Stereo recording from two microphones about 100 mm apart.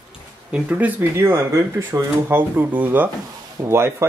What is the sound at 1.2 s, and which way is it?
Speech, 30° right (ahead or behind).